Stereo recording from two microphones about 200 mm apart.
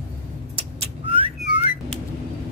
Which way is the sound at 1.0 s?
30° right (ahead or behind).